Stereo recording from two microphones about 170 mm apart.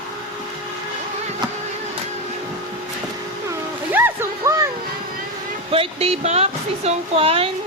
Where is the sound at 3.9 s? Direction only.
10° right (ahead or behind).